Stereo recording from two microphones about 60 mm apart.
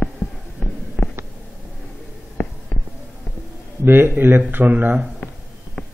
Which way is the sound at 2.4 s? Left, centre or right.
Left.